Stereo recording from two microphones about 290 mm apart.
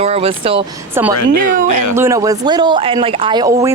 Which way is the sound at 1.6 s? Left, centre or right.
Left.